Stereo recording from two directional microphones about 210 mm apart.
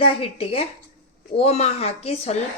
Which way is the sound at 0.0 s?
25° left (ahead or behind).